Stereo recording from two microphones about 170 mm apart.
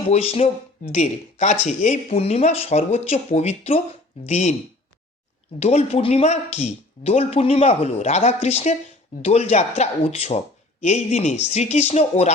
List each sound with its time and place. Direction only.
0.1 s speech: 35° left (ahead or behind)
5.5 s speech: 40° left (ahead or behind)